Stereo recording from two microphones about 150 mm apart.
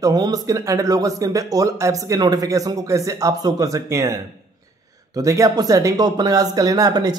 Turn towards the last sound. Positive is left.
turn(degrees=-25)  # may be behind; listen again after turning